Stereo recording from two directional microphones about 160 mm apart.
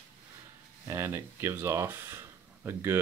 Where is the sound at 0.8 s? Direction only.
15° right (ahead or behind).